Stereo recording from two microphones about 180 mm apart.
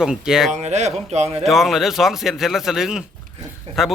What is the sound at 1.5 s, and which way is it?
A man's voice, centre (ahead or behind).